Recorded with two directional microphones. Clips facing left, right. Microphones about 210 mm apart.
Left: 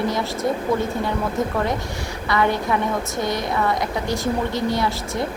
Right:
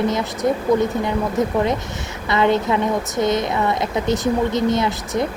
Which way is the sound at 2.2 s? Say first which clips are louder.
Right 3 dB; 20° right (ahead or behind).